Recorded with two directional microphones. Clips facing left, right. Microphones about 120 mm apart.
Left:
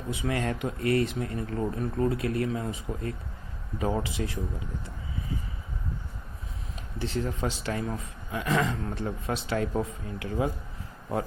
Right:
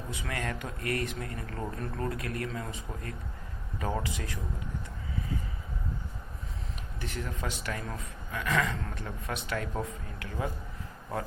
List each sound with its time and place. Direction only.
0.1 s speech: 20° left (ahead or behind)
1.5 s speech: 10° left (ahead or behind)
2.0 s speech: 20° left (ahead or behind)
7.0 s speech: 25° left (ahead or behind)